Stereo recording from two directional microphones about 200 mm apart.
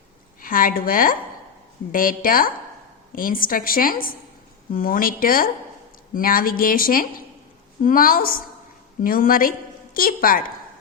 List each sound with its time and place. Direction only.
0.4 s a woman's voice: 45° left (ahead or behind)